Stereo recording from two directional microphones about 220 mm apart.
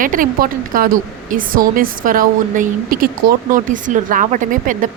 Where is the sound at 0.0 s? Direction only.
40° right (ahead or behind).